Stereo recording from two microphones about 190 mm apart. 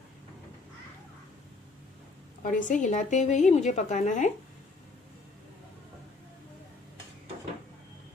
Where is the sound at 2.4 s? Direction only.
40° left (ahead or behind).